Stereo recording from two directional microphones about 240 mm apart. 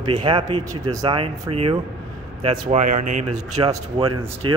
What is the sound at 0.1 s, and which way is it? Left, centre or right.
Speech, centre.